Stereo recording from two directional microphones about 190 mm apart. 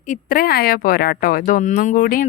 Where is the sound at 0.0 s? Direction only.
45° left (ahead or behind).